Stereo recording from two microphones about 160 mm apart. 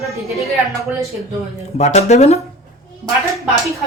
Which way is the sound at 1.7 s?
45° left (ahead or behind).